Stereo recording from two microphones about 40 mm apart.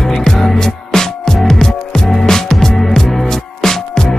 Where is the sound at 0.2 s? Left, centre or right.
Centre.